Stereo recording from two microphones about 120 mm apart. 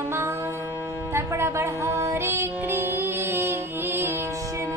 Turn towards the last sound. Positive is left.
turn(degrees=-20)  # may be behind; listen again after turning